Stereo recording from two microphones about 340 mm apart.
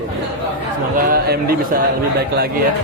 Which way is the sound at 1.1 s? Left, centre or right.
Right.